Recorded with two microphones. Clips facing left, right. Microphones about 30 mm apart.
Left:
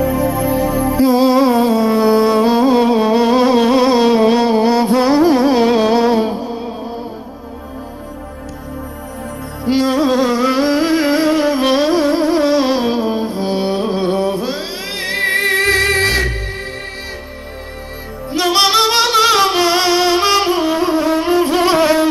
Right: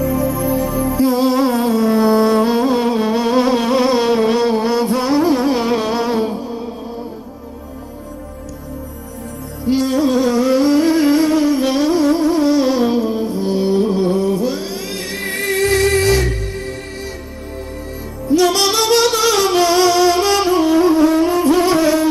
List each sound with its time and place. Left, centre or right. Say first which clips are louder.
0.0 s music: left 2 dB; left
9.7 s music: left 1 dB; left
18.3 s music: left 1 dB; left